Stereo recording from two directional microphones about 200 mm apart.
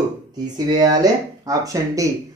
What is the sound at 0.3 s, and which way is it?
Speech, 20° right (ahead or behind).